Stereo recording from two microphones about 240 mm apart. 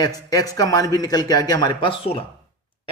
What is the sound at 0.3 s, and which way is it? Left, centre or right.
Speech, centre.